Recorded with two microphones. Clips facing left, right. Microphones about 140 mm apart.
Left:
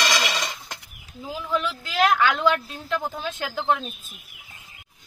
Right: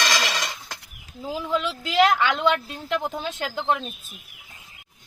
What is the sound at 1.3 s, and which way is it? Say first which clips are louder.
A woman's voice: right 1 dB; 25° right (ahead or behind).